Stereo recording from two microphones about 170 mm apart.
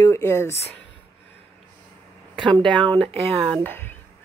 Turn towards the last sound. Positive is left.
turn(degrees=10)  # may be behind; listen again after turning